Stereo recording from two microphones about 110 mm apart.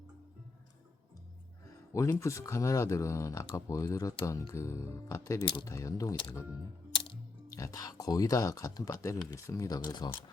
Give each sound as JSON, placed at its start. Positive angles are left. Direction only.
{"t": 1.9, "sound": "speech", "side_deg": 25}
{"t": 7.5, "sound": "speech", "side_deg": 30}